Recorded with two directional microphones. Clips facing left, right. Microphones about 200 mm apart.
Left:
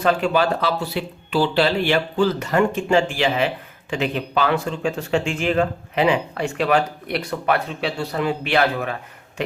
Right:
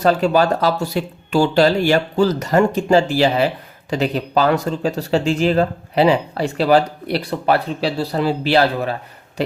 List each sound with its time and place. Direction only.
0.0 s speech: 40° right (ahead or behind)